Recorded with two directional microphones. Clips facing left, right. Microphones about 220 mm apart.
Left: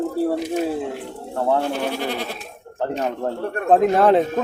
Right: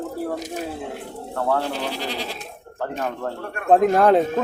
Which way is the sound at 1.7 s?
55° left (ahead or behind).